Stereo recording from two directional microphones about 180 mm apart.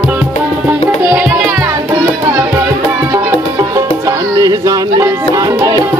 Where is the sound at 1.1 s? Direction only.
5° right (ahead or behind).